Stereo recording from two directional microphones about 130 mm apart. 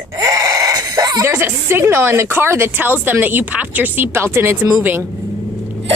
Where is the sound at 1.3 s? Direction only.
15° right (ahead or behind).